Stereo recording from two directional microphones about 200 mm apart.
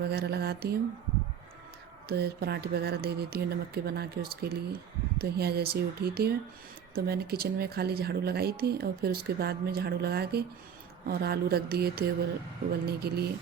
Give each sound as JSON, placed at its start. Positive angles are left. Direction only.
{"t": 0.0, "sound": "speech", "side_deg": -55}
{"t": 2.0, "sound": "speech", "side_deg": -55}